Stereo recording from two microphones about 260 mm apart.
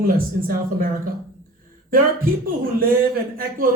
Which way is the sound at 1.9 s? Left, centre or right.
Right.